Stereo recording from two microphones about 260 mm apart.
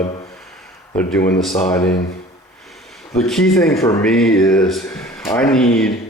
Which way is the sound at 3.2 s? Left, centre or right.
Centre.